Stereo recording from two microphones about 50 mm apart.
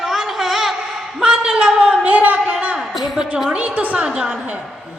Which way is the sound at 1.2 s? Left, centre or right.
Centre.